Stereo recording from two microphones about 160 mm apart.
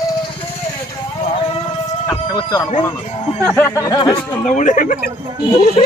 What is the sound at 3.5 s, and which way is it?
Speech, 15° left (ahead or behind).